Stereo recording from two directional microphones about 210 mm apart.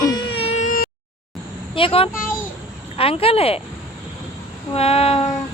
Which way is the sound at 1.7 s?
25° left (ahead or behind).